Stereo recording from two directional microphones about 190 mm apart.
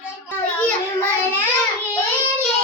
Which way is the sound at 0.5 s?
10° left (ahead or behind).